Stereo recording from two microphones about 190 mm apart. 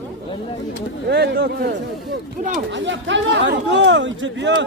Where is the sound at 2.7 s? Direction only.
70° right (ahead or behind).